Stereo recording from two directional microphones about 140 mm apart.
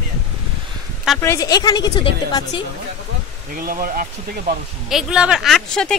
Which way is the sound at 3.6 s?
90° right.